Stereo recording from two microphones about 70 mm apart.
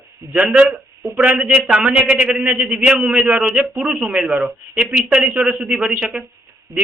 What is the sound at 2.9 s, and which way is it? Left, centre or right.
A man's voice, centre.